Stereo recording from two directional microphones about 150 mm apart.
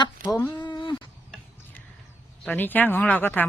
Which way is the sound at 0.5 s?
30° left (ahead or behind).